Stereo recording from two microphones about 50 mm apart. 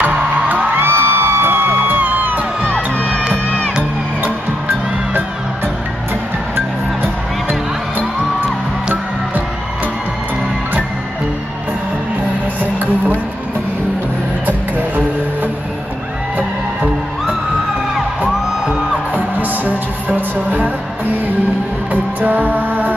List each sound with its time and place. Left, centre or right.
0.0 s music: right
0.7 s music: right
3.0 s music: right
6.5 s music: right
19.1 s music: right
22.2 s music: right